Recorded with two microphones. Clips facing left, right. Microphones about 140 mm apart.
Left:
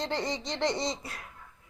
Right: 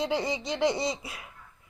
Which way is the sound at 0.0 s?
5° right (ahead or behind).